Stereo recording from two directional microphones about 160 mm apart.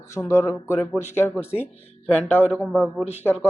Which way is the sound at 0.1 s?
15° left (ahead or behind).